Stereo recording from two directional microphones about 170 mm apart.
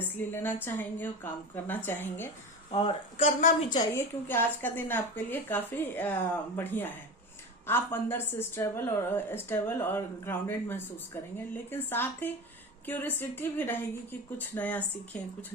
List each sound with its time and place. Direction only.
0.2 s a woman's voice: 10° left (ahead or behind)
2.7 s speech: 30° left (ahead or behind)
3.9 s a woman's voice: 15° left (ahead or behind)